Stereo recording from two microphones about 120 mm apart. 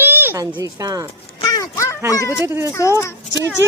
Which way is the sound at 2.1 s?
25° left (ahead or behind).